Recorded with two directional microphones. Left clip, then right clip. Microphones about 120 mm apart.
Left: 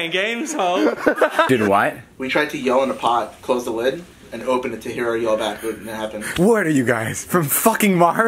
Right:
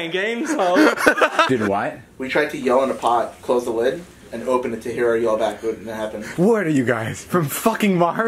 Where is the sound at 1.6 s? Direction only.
20° left (ahead or behind).